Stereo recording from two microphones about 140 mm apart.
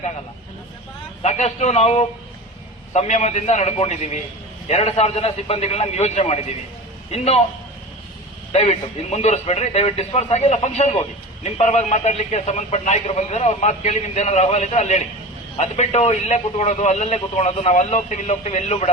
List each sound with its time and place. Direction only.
1.2 s a man's voice: 50° left (ahead or behind)
8.5 s speech: 50° left (ahead or behind)